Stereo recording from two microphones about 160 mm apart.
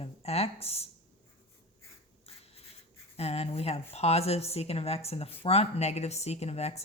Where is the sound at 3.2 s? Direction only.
40° left (ahead or behind).